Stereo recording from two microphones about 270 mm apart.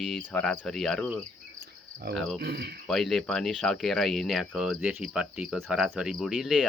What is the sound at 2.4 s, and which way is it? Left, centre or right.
Speech, right.